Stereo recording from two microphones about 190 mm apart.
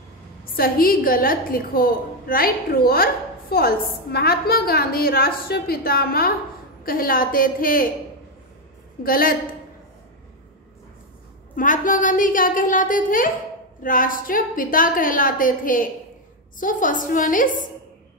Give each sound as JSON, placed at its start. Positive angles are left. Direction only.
{"t": 0.6, "sound": "a woman's voice", "side_deg": 50}
{"t": 9.0, "sound": "a woman's voice", "side_deg": 50}
{"t": 11.5, "sound": "a woman's voice", "side_deg": 45}